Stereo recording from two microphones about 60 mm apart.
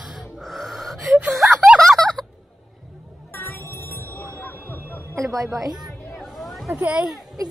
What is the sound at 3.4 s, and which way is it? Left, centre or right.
Music, left.